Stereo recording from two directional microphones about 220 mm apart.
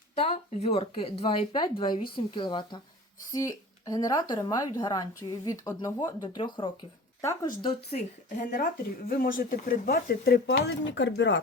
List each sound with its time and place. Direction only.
0.2 s speech: 30° left (ahead or behind); by 7.5 s 15° left (ahead or behind)
7.7 s speech: 30° left (ahead or behind); by 11.3 s 55° left (ahead or behind)